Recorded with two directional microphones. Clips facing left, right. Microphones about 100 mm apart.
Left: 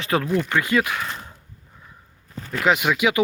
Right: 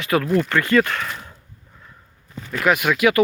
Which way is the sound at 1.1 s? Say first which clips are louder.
Right 1 dB; 30° left (ahead or behind).